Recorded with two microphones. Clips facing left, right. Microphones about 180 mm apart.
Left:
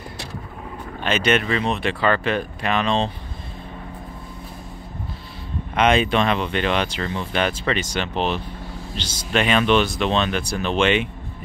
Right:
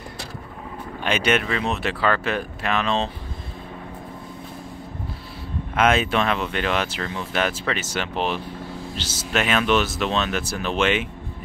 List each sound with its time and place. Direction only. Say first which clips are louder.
1.0 s speech: left 2 dB; 10° right (ahead or behind)
5.8 s speech: left 2 dB; 5° right (ahead or behind)